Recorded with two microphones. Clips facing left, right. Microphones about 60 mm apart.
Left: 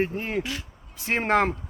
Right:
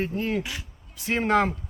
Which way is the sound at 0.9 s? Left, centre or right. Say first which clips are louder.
Even; left.